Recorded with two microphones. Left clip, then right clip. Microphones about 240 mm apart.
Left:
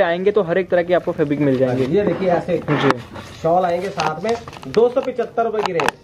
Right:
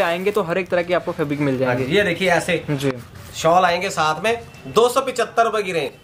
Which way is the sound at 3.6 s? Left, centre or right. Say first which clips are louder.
Right 2 dB; right.